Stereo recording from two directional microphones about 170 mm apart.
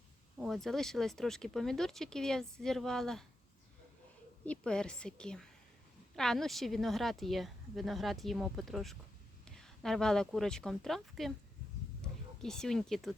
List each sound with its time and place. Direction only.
0.3 s speech: centre (ahead or behind)
4.4 s speech: 5° left (ahead or behind)